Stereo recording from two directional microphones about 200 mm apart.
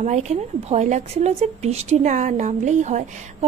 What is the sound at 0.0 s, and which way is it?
Speech, 35° right (ahead or behind).